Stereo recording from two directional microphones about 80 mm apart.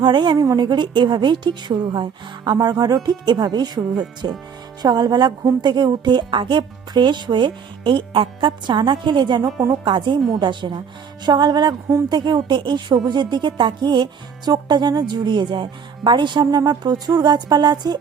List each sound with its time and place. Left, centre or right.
0.0 s speech: right
2.6 s speech: right
9.4 s speech: right
9.8 s a woman's voice: right
11.3 s speech: right